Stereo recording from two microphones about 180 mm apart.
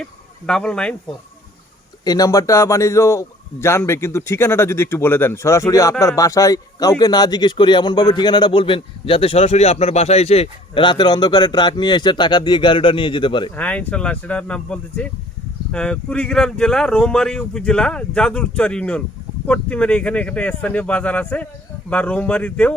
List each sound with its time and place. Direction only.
0.0 s speech: 5° left (ahead or behind)
2.0 s a man's voice: 20° left (ahead or behind)
13.6 s a man's voice: 5° left (ahead or behind)